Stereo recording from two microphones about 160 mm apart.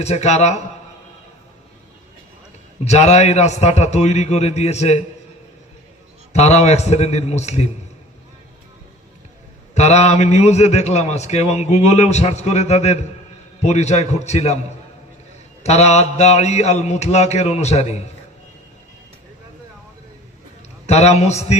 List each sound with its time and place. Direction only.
0.0 s a man's voice: 45° left (ahead or behind)
2.8 s a man's voice: 45° left (ahead or behind)
6.3 s a man's voice: 45° left (ahead or behind)
9.7 s a man's voice: 45° left (ahead or behind)
15.6 s a man's voice: 45° left (ahead or behind)
20.8 s a man's voice: 45° left (ahead or behind)